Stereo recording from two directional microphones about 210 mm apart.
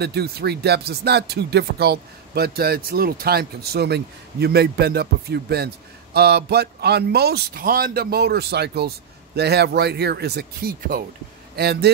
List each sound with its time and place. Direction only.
0.0 s speech: 50° right (ahead or behind)